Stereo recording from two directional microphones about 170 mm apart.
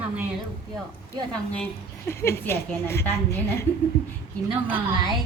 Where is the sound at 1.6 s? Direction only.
15° left (ahead or behind).